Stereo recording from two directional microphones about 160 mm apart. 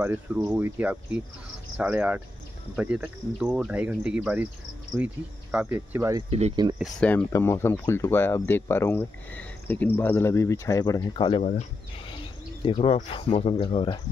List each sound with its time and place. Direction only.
0.0 s speech: 15° right (ahead or behind)
6.5 s speech: 25° right (ahead or behind)
7.0 s speech: 10° left (ahead or behind); by 11.4 s 30° left (ahead or behind)
12.6 s speech: 40° left (ahead or behind)